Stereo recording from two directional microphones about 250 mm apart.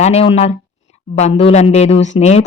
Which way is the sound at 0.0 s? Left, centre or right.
Left.